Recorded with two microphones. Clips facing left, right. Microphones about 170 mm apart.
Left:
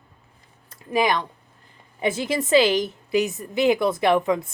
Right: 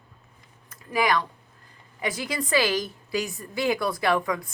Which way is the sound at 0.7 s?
25° left (ahead or behind).